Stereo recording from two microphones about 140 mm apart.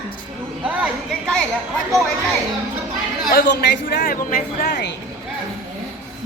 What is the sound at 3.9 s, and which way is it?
Speech, 90° left.